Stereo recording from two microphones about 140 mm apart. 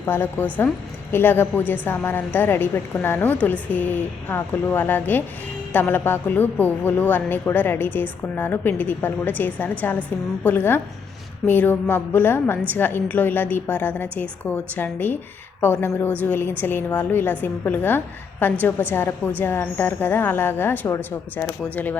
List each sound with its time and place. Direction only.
0.0 s a man's voice: 15° left (ahead or behind)